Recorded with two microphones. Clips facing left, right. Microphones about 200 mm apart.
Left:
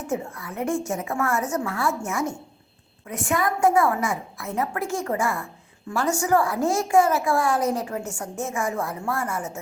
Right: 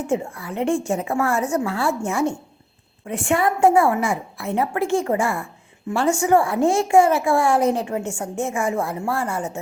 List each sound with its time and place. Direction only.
0.1 s a woman's voice: 30° right (ahead or behind)